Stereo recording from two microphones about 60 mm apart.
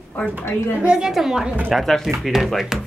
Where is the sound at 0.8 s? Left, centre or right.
Centre.